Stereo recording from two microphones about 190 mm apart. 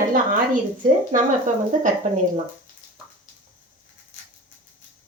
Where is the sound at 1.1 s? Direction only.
40° right (ahead or behind).